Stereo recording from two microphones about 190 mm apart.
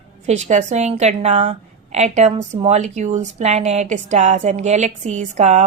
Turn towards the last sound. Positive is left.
turn(degrees=-35)  # may be behind; listen again after turning